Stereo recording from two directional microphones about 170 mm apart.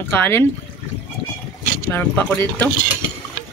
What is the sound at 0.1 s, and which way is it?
Speech, 10° left (ahead or behind).